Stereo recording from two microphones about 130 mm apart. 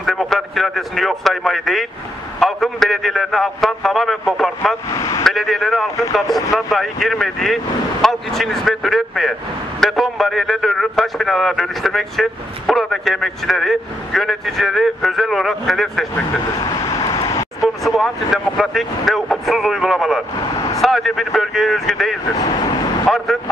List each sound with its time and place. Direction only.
0.0 s a man's voice: centre (ahead or behind)
4.9 s speech: 25° left (ahead or behind)
5.2 s a man's voice: centre (ahead or behind)
16.6 s vehicle: 25° left (ahead or behind)
17.6 s a man's voice: centre (ahead or behind)
20.5 s vehicle: 25° left (ahead or behind)
20.8 s a man's voice: centre (ahead or behind)
22.4 s speech: 35° left (ahead or behind)
23.0 s speech: centre (ahead or behind)